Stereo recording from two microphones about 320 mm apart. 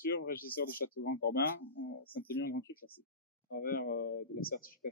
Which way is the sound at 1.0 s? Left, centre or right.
Left.